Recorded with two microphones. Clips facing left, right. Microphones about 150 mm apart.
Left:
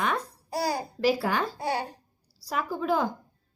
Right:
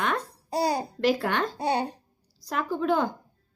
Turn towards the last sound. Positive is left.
turn(degrees=5)  # may be behind; listen again after turning